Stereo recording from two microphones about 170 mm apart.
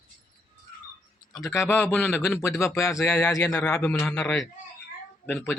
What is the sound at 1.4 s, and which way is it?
Speech, 15° left (ahead or behind).